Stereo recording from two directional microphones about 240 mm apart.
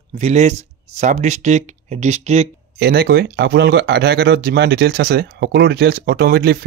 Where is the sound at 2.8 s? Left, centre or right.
Right.